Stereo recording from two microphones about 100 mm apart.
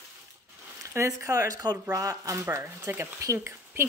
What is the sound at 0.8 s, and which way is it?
Speech, 30° right (ahead or behind).